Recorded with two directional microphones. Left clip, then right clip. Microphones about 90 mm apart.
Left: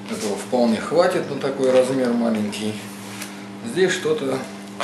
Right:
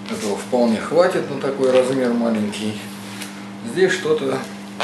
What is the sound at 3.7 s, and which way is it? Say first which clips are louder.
Speech: right 2 dB; 10° left (ahead or behind).